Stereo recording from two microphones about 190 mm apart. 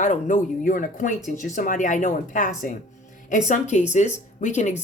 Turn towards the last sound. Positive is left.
turn(degrees=40)  # may be behind; listen again after turning